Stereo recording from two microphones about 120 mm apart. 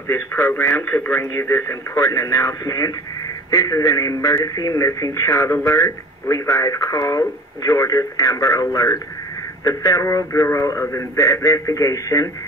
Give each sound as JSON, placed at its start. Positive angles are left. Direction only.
{"t": 0.1, "sound": "speech", "side_deg": 20}